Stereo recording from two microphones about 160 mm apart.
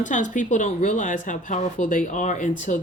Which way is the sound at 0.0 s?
50° left (ahead or behind).